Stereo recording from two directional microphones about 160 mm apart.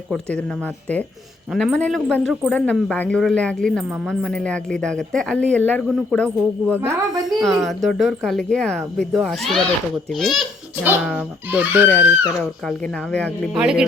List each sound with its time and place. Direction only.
0.1 s a woman's voice: 5° left (ahead or behind)
6.7 s speech: 15° right (ahead or behind)
7.3 s a woman's voice: centre (ahead or behind)
11.2 s speech: 10° right (ahead or behind)
11.9 s a woman's voice: 15° left (ahead or behind)
13.5 s a woman's voice: 5° right (ahead or behind)